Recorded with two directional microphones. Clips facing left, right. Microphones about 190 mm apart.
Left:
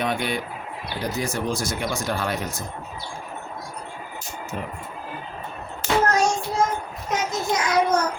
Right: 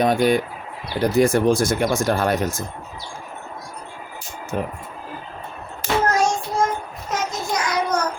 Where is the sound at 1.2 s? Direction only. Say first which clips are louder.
Right 11 dB; 55° right (ahead or behind).